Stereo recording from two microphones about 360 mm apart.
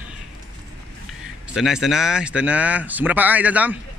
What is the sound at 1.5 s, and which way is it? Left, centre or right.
Speech, centre.